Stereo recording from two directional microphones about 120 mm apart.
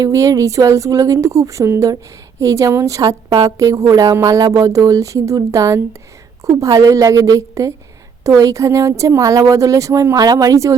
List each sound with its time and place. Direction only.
0.0 s a woman's voice: 25° right (ahead or behind)